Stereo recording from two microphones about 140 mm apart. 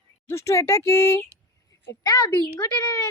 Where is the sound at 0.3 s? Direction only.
20° left (ahead or behind).